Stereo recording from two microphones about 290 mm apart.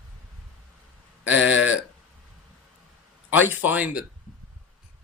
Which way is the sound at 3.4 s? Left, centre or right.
Centre.